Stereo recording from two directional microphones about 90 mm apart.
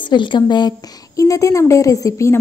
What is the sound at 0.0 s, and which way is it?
Speech, 60° left (ahead or behind).